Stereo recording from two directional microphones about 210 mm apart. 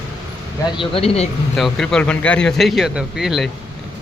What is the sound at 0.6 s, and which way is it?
Speech, 25° left (ahead or behind).